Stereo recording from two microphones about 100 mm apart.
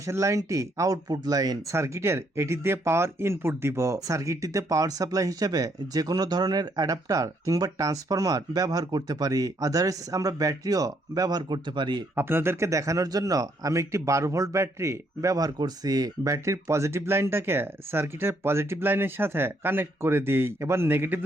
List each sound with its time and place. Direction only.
0.1 s speech: 30° right (ahead or behind); by 12.0 s 50° right (ahead or behind)
12.1 s speech: 25° right (ahead or behind)